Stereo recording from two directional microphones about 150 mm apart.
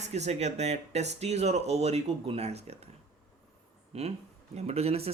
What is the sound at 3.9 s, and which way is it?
Speech, 45° right (ahead or behind).